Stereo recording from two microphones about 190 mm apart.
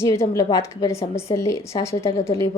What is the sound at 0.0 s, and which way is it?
A woman's voice, 15° left (ahead or behind).